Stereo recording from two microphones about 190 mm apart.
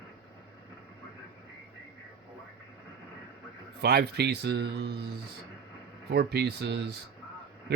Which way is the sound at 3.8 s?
55° right (ahead or behind).